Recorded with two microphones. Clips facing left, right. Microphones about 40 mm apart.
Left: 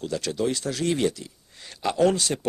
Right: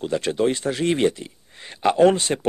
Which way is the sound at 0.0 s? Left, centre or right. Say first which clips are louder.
Right 5 dB; right.